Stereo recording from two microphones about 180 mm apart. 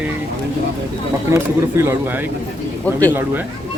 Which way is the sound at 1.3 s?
15° right (ahead or behind).